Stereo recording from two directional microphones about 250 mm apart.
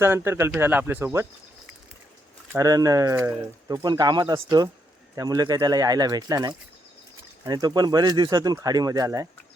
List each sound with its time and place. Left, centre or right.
0.0 s speech: centre
2.5 s speech: centre